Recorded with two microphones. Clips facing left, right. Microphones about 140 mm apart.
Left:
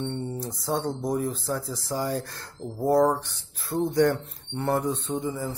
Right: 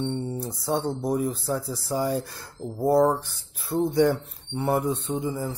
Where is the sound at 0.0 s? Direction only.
15° right (ahead or behind).